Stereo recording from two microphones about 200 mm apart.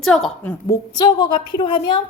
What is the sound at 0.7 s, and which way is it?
A woman's voice, 20° left (ahead or behind).